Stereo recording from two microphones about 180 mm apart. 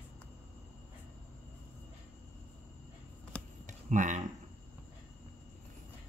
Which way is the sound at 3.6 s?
45° right (ahead or behind).